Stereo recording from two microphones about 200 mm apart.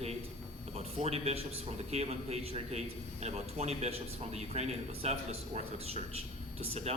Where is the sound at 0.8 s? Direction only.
30° right (ahead or behind).